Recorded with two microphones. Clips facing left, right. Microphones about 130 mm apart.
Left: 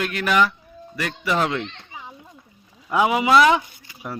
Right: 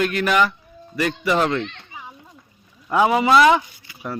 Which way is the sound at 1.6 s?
30° left (ahead or behind).